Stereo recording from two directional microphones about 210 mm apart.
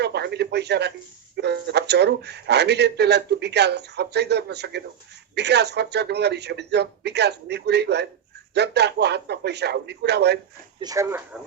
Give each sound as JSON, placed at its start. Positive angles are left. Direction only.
{"t": 0.0, "sound": "a man's voice", "side_deg": -50}
{"t": 10.8, "sound": "speech", "side_deg": -15}